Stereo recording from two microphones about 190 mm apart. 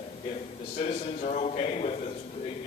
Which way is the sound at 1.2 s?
35° left (ahead or behind).